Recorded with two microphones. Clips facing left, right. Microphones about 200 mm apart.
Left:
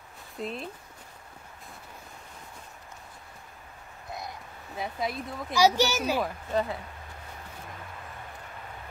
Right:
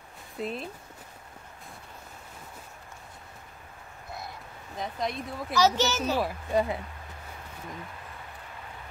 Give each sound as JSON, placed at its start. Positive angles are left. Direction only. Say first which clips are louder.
{"t": 0.4, "sound": "speech", "louder": "right 1 dB", "side_deg": 0}
{"t": 4.7, "sound": "speech", "louder": "even", "side_deg": 5}
{"t": 6.2, "sound": "speech", "louder": "right 2 dB", "side_deg": -10}